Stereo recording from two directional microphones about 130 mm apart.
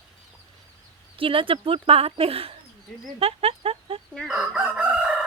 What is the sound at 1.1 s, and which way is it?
Speech, 45° right (ahead or behind).